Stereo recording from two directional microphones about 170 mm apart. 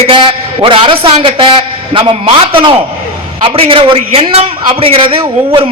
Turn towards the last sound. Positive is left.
turn(degrees=-30)  # may be behind; listen again after turning